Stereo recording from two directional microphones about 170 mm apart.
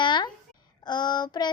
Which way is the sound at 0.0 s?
25° left (ahead or behind).